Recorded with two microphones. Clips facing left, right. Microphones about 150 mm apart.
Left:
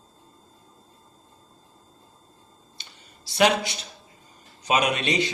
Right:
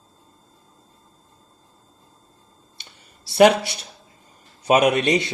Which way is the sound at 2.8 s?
55° right (ahead or behind).